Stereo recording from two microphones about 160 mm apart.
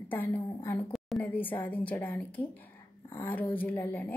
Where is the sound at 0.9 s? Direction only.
Centre (ahead or behind).